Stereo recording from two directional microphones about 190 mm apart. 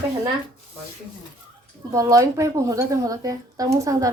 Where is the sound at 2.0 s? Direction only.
15° right (ahead or behind).